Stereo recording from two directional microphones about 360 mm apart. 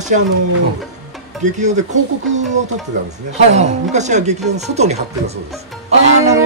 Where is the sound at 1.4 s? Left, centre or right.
Centre.